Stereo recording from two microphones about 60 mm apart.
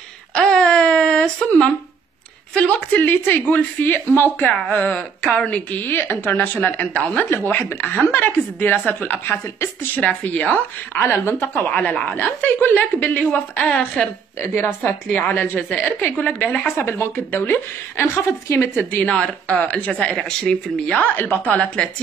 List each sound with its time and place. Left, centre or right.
0.3 s a sound: centre
2.5 s a woman's voice: left
4.6 s a woman's voice: left
7.2 s a woman's voice: left
9.9 s speech: left
11.0 s a woman's voice: left; by 14.1 s centre
14.4 s a woman's voice: left
15.1 s a woman's voice: left
16.3 s a woman's voice: left
18.8 s speech: left
21.0 s speech: left